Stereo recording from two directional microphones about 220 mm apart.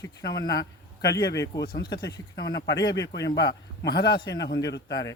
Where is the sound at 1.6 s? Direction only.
45° left (ahead or behind).